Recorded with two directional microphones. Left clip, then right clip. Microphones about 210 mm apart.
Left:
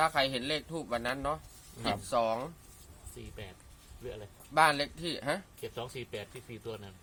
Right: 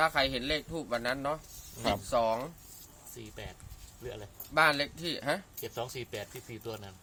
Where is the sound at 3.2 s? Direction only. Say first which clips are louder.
Right 2 dB; 45° right (ahead or behind).